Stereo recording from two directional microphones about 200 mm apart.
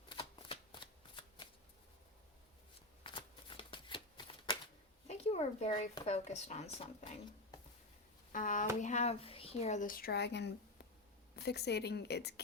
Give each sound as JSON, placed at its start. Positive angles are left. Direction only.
{"t": 0.1, "sound": "shuffling cards", "side_deg": 25}
{"t": 3.0, "sound": "shuffling cards", "side_deg": 25}
{"t": 5.0, "sound": "a sound", "side_deg": 30}
{"t": 6.1, "sound": "speech", "side_deg": 30}
{"t": 8.3, "sound": "speech", "side_deg": 40}